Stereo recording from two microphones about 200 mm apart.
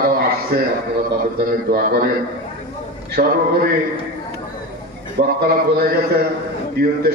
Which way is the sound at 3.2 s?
45° right (ahead or behind).